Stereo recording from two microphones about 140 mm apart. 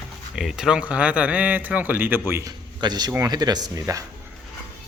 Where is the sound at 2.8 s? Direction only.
30° right (ahead or behind).